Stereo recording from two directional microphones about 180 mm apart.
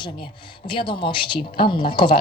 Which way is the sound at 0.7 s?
30° left (ahead or behind).